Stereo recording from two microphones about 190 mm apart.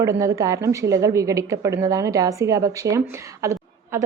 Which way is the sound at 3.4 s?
15° right (ahead or behind).